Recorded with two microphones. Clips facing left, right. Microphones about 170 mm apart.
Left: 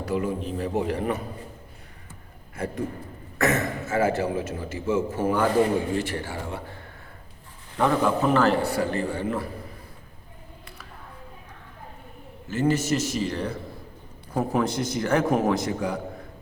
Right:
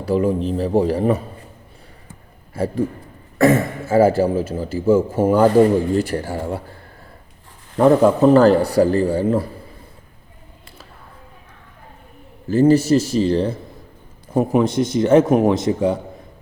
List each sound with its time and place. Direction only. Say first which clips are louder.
0.0 s a man's voice: right 8 dB; 30° right (ahead or behind)
2.5 s a man's voice: right 8 dB; 30° right (ahead or behind)
7.8 s a man's voice: right 9 dB; 35° right (ahead or behind)
12.5 s a man's voice: right 10 dB; 35° right (ahead or behind)